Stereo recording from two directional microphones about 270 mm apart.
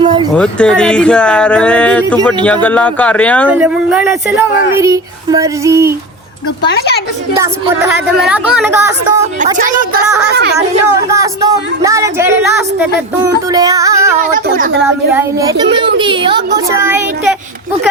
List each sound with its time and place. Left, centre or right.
0.0 s a sound: centre
0.3 s speech: centre
6.7 s a woman's voice: left
7.3 s speech: centre
9.6 s a woman's voice: right
11.1 s speech: centre
13.5 s speech: centre
14.2 s speech: right
15.1 s speech: centre